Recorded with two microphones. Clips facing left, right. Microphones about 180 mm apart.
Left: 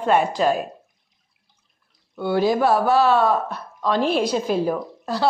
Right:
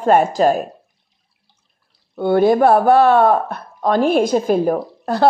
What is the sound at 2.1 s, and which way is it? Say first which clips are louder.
A woman's voice: right 6 dB; 55° right (ahead or behind).